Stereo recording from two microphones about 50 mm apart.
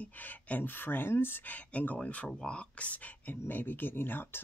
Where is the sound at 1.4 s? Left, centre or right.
Left.